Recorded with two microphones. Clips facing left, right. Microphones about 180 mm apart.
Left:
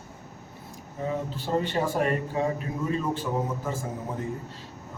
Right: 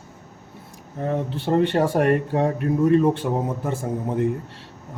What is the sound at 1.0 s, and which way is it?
Speech, 65° right (ahead or behind).